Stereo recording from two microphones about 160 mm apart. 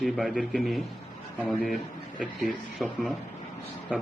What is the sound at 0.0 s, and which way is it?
A man's voice, centre (ahead or behind).